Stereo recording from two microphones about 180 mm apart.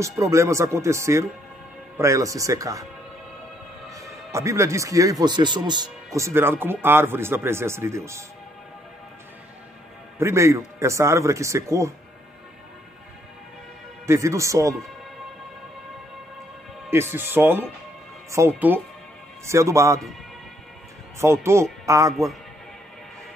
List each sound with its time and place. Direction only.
0.0 s speech: 15° right (ahead or behind)
3.9 s speech: 15° right (ahead or behind)
6.1 s speech: 15° right (ahead or behind)
10.1 s speech: 15° right (ahead or behind)
14.0 s speech: 15° right (ahead or behind)
16.9 s speech: 10° right (ahead or behind)
21.2 s speech: 15° right (ahead or behind)
22.1 s a man's voice: centre (ahead or behind)